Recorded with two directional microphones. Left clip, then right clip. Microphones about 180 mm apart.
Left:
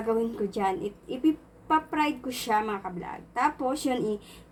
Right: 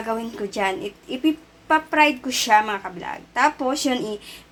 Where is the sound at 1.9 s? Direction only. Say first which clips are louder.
Right 10 dB; 25° right (ahead or behind).